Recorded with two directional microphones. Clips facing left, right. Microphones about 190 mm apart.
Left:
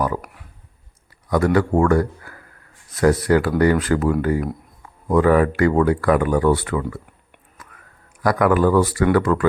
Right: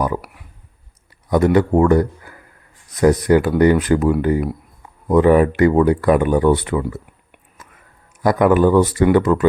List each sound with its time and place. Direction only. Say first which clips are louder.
0.0 s a sound: right 2 dB; 15° right (ahead or behind)
1.3 s a man's voice: right 3 dB; 20° right (ahead or behind)
5.1 s speech: right 3 dB; 20° right (ahead or behind)
7.6 s whispering: even; 25° right (ahead or behind)
8.2 s speech: right 3 dB; 25° right (ahead or behind)